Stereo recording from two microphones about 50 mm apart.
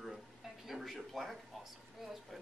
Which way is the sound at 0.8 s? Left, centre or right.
Centre.